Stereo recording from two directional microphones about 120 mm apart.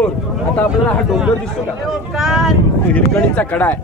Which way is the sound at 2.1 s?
Centre (ahead or behind).